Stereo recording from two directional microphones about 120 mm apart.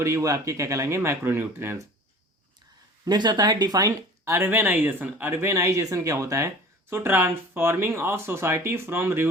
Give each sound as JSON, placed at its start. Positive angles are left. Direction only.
{"t": 0.0, "sound": "speech", "side_deg": -25}
{"t": 3.0, "sound": "speech", "side_deg": -35}
{"t": 4.4, "sound": "speech", "side_deg": -15}